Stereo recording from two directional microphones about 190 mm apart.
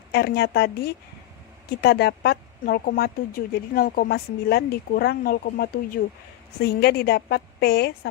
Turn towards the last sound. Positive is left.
turn(degrees=55)  # may be behind; listen again after turning